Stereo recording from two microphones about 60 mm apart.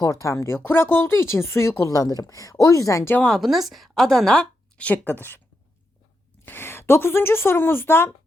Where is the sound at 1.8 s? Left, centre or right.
Left.